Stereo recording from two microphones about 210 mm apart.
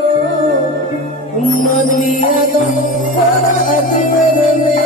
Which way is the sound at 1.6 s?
40° left (ahead or behind).